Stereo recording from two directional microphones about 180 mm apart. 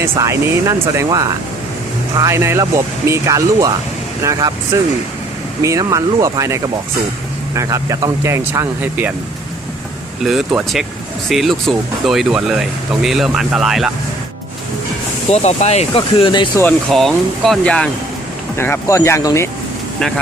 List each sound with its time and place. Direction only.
0.0 s speech: 15° right (ahead or behind)
10.2 s speech: centre (ahead or behind)
15.3 s speech: 35° left (ahead or behind)
16.9 s speech: centre (ahead or behind)